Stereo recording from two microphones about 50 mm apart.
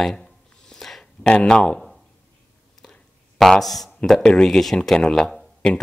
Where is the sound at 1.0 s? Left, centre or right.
Centre.